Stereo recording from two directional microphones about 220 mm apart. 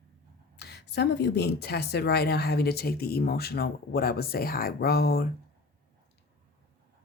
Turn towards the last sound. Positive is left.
turn(degrees=45)  # may be behind; listen again after turning